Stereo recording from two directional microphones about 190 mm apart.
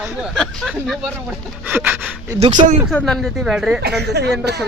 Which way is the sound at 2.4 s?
35° right (ahead or behind).